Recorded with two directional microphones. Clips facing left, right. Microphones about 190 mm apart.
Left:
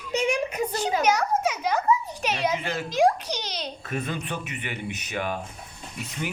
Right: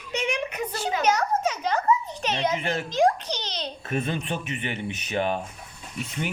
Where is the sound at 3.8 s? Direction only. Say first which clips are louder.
Right 4 dB; 25° right (ahead or behind).